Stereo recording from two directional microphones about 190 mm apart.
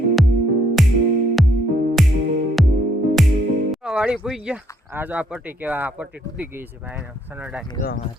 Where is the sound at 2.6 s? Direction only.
Centre (ahead or behind).